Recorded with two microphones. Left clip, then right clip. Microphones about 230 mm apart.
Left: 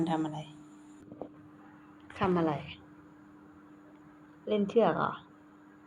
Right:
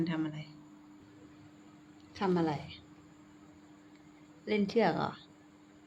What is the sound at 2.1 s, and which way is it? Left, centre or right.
Speech, right.